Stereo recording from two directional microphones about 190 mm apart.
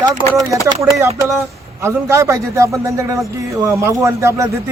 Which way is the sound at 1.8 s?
15° right (ahead or behind).